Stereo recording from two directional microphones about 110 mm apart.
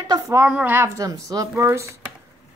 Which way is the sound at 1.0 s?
30° right (ahead or behind).